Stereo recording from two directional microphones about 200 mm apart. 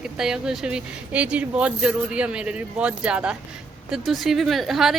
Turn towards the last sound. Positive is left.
turn(degrees=0)  # may be behind; listen again after turning